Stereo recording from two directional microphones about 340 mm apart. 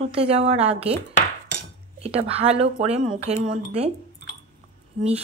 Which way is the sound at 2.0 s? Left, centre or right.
Centre.